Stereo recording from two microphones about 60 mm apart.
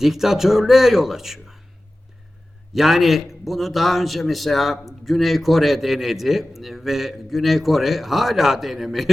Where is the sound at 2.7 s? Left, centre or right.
Centre.